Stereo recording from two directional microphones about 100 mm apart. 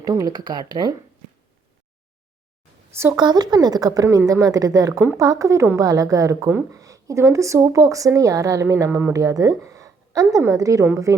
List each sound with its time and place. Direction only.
0.0 s speech: 40° right (ahead or behind)
2.9 s a woman's voice: 25° right (ahead or behind)
3.2 s a woman's voice: 45° right (ahead or behind)